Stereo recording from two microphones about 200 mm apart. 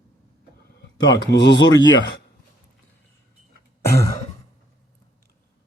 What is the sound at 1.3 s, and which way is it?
Speech, 60° left (ahead or behind).